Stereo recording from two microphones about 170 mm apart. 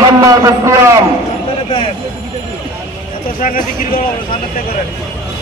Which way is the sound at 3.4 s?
55° left (ahead or behind).